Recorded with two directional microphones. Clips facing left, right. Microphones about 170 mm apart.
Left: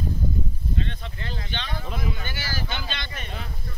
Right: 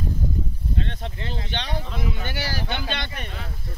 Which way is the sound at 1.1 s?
20° right (ahead or behind).